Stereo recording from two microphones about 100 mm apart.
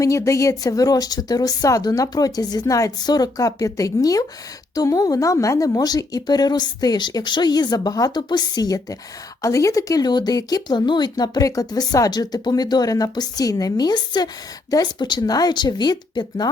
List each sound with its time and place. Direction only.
0.0 s speech: 30° left (ahead or behind)